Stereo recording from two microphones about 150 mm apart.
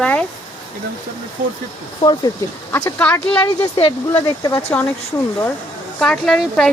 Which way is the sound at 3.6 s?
40° left (ahead or behind).